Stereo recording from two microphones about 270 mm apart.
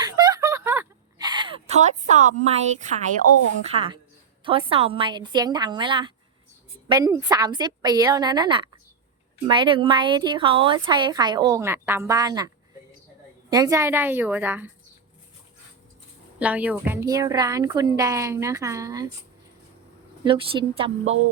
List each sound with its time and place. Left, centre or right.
0.0 s a sound: centre
3.7 s a woman's voice: right
13.5 s a woman's voice: centre
16.4 s a woman's voice: centre
20.2 s speech: centre